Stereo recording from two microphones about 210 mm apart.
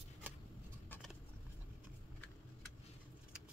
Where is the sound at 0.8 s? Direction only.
10° left (ahead or behind).